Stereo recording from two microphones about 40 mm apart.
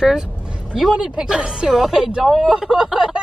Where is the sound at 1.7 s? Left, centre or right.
Centre.